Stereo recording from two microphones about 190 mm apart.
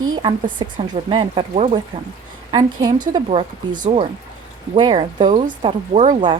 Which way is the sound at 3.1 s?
25° right (ahead or behind).